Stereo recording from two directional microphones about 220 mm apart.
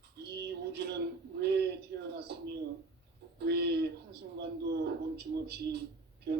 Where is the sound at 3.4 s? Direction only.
45° right (ahead or behind).